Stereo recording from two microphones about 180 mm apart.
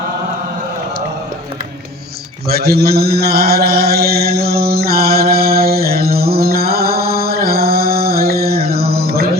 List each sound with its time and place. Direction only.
2.5 s mantra: 60° right (ahead or behind)